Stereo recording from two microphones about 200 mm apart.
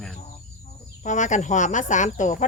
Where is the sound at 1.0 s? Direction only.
35° left (ahead or behind).